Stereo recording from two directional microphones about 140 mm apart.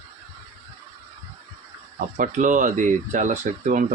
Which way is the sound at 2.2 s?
65° right (ahead or behind).